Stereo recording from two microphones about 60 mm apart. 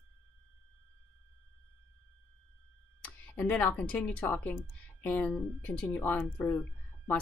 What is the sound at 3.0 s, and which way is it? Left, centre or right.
Speech, left.